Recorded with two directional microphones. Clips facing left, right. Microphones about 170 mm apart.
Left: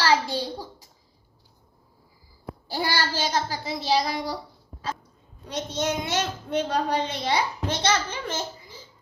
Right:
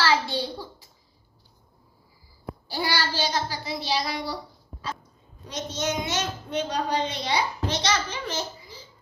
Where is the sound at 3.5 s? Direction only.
45° left (ahead or behind).